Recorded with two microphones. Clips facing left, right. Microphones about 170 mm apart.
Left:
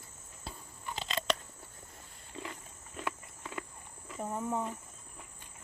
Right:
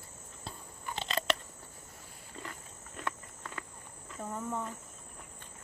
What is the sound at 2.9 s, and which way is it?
Walk, 10° left (ahead or behind).